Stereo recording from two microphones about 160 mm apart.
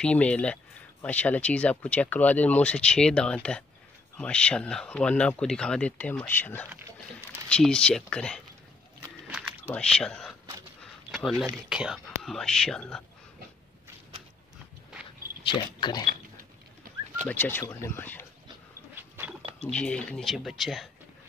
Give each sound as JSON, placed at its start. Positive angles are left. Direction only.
{"t": 0.0, "sound": "speech", "side_deg": 5}
{"t": 9.3, "sound": "a sound", "side_deg": -5}
{"t": 9.8, "sound": "speech", "side_deg": 5}
{"t": 10.8, "sound": "a sound", "side_deg": 0}
{"t": 11.7, "sound": "speech", "side_deg": -5}
{"t": 15.4, "sound": "speech", "side_deg": 30}
{"t": 16.8, "sound": "bird", "side_deg": -60}
{"t": 17.3, "sound": "speech", "side_deg": 15}
{"t": 18.9, "sound": "dog", "side_deg": -15}
{"t": 19.6, "sound": "speech", "side_deg": 5}